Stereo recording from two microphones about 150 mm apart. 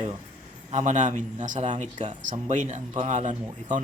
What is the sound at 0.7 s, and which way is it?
Speech, 50° right (ahead or behind).